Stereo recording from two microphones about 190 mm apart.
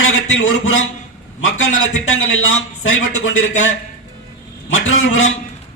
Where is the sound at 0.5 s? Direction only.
90° left.